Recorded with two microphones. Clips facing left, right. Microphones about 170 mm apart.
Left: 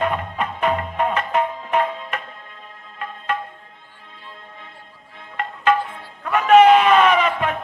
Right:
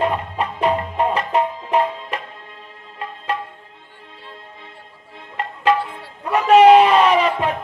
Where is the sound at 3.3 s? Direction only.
35° right (ahead or behind).